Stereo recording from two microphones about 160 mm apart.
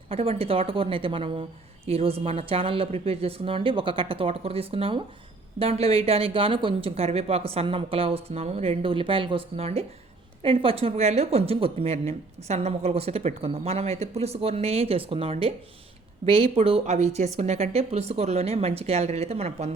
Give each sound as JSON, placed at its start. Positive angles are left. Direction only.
{"t": 0.1, "sound": "speech", "side_deg": -35}